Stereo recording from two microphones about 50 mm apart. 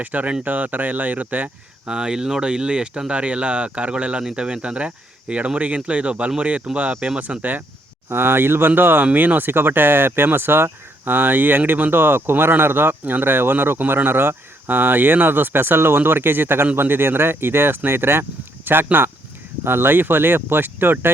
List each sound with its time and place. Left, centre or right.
0.0 s speech: right
1.9 s speech: centre; by 7.6 s right
8.1 s speech: right